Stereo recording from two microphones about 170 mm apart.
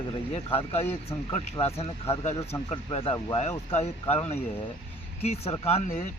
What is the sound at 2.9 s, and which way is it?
Speech, 35° left (ahead or behind).